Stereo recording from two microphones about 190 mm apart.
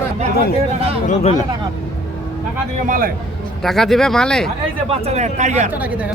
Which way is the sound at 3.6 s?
Centre (ahead or behind).